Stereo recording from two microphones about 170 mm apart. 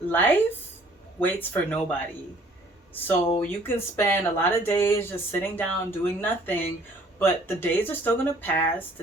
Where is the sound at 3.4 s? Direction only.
15° left (ahead or behind).